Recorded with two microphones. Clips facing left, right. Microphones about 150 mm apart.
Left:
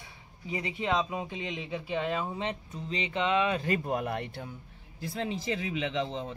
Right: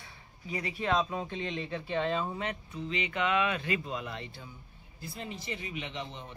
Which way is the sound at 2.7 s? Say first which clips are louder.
Even; 35° left (ahead or behind).